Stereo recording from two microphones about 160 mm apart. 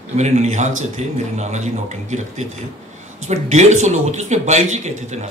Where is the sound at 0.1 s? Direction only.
45° right (ahead or behind).